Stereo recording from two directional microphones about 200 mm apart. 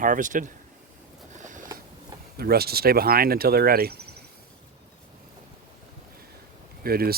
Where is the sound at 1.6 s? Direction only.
15° right (ahead or behind).